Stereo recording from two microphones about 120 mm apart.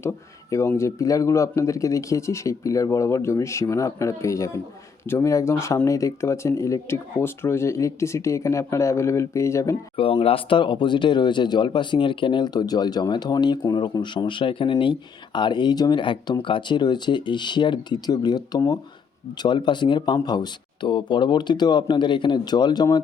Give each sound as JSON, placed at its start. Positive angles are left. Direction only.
{"t": 0.5, "sound": "speech", "side_deg": 25}
{"t": 10.0, "sound": "speech", "side_deg": 50}